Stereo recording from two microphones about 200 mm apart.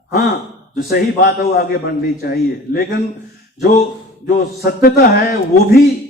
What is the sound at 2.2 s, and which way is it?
Speech, 50° left (ahead or behind).